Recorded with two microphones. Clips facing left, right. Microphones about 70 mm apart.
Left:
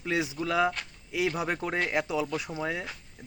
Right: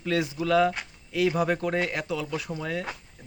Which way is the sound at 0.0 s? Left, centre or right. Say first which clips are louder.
Right 3 dB; centre.